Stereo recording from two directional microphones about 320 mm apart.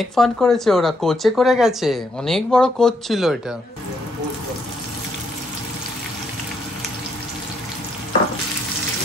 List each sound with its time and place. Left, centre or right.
0.0 s speech: centre